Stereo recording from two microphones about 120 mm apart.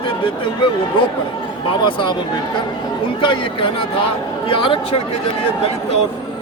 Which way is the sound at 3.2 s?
45° left (ahead or behind).